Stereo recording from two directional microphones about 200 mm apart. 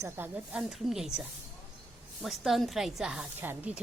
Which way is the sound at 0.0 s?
10° right (ahead or behind).